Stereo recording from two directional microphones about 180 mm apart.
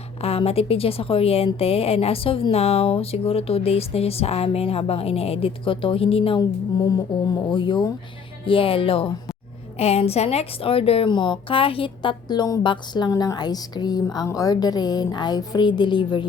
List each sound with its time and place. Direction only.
0.2 s a woman's voice: 35° left (ahead or behind)
6.8 s a woman's voice: 20° left (ahead or behind)